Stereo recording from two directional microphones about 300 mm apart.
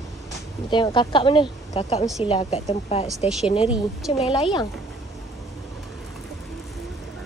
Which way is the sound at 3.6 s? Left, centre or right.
Centre.